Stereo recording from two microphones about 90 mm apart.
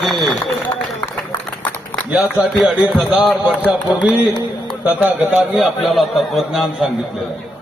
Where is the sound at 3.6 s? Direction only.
15° right (ahead or behind).